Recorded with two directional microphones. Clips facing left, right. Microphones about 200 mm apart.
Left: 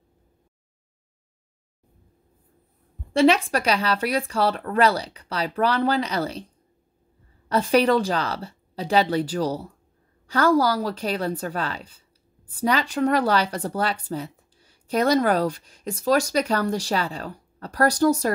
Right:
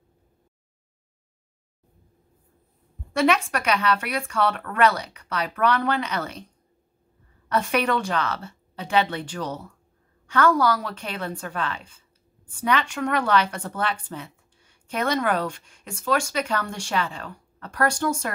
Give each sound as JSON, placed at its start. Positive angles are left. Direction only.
{"t": 3.1, "sound": "speech", "side_deg": 30}